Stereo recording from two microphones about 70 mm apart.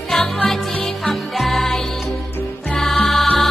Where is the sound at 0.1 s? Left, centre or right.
Centre.